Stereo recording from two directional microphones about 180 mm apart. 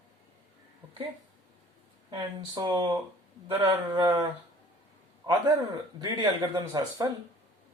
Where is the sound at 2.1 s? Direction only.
25° right (ahead or behind).